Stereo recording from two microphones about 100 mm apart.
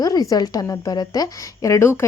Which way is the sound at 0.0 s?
40° left (ahead or behind).